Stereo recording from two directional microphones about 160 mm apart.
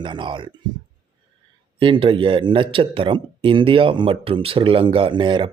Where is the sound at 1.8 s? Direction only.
30° right (ahead or behind).